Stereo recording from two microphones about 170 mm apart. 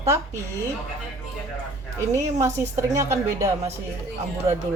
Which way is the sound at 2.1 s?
15° right (ahead or behind).